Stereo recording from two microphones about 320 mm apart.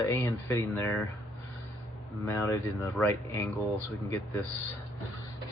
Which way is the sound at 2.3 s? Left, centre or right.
Centre.